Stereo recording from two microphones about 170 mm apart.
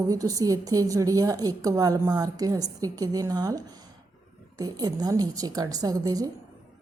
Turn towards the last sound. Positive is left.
turn(degrees=-20)  # may be behind; listen again after turning